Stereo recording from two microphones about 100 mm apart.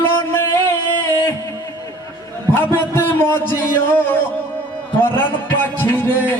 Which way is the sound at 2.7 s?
20° left (ahead or behind).